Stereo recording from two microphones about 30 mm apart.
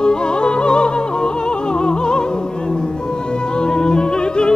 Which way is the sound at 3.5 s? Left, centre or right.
Left.